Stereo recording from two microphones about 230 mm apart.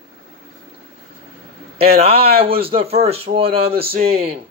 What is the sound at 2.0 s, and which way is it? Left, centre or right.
Speech, right.